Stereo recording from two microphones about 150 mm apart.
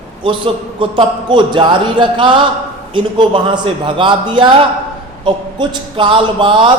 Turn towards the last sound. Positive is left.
turn(degrees=-30)  # may be behind; listen again after turning